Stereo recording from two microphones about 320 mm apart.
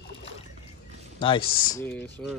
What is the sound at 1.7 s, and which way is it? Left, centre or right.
Speech, centre.